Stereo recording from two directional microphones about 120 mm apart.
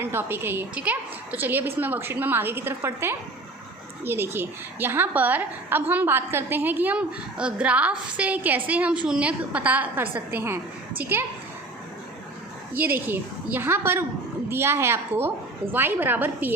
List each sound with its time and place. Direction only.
0.0 s a woman's voice: 20° right (ahead or behind)
12.7 s a woman's voice: 15° right (ahead or behind)